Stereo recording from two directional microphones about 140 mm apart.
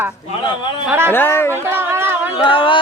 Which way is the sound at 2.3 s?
40° left (ahead or behind).